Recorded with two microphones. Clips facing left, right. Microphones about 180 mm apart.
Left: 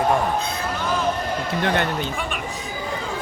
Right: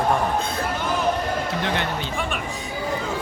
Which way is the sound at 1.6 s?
50° left (ahead or behind).